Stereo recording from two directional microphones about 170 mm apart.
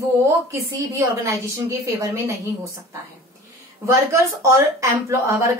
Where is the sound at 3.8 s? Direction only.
15° right (ahead or behind).